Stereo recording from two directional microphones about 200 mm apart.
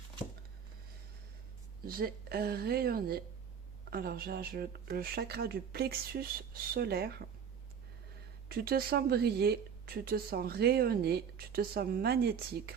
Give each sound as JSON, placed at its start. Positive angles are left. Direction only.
{"t": 1.8, "sound": "speech", "side_deg": -50}
{"t": 8.4, "sound": "speech", "side_deg": -50}